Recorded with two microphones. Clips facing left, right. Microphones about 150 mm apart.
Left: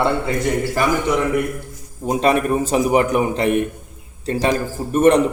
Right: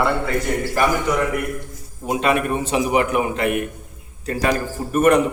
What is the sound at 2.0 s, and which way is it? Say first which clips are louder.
A man's voice: left 3 dB; 35° left (ahead or behind).